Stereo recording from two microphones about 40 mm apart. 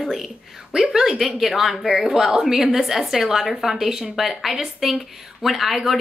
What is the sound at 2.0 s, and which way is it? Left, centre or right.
A woman's voice, centre.